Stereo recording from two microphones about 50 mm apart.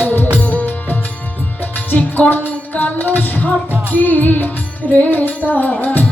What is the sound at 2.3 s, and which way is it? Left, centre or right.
Music, left.